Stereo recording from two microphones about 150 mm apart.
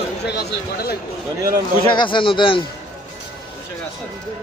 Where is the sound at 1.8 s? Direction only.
35° left (ahead or behind).